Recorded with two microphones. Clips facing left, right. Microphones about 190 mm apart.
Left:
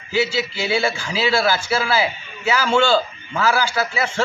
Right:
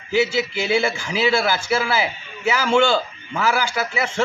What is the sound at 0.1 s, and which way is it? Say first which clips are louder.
A man's voice: right 2 dB; 20° right (ahead or behind).